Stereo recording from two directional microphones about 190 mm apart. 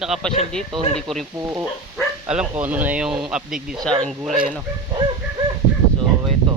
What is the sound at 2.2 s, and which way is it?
Speech, 5° right (ahead or behind).